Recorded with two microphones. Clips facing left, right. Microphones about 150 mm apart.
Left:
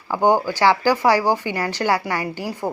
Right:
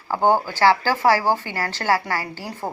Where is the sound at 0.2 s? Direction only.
15° left (ahead or behind).